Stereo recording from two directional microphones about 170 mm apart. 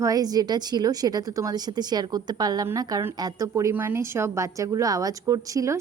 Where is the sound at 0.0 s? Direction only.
20° right (ahead or behind).